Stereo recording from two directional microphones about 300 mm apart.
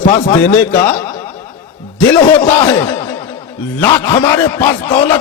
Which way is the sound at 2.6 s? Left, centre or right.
Centre.